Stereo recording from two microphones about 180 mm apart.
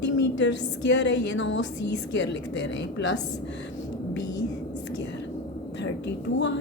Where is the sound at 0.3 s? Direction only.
80° left.